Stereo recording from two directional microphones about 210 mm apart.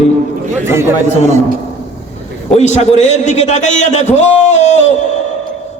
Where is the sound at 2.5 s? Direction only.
35° left (ahead or behind).